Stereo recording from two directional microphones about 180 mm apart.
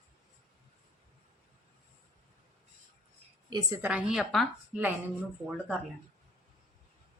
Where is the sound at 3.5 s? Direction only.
25° right (ahead or behind).